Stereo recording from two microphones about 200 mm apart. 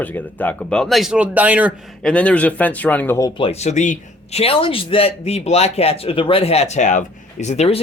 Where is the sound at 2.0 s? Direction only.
5° left (ahead or behind).